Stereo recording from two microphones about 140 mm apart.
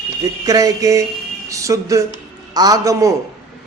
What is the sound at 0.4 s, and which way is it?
A man's voice, 25° right (ahead or behind).